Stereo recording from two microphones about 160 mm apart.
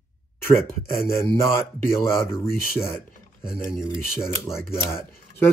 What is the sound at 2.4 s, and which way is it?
Speech, 15° left (ahead or behind).